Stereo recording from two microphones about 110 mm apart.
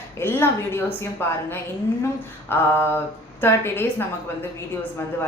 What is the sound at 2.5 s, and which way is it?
A woman's voice, 20° left (ahead or behind).